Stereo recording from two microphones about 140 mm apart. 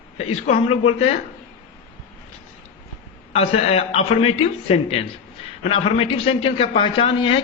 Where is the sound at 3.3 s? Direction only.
45° left (ahead or behind).